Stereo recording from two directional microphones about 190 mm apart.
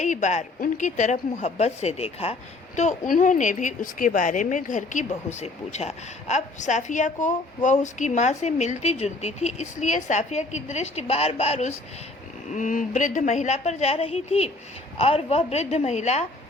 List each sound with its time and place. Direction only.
0.0 s a woman's voice: 40° left (ahead or behind)